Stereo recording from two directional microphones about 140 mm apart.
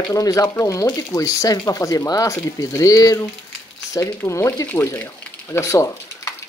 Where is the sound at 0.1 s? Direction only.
25° left (ahead or behind).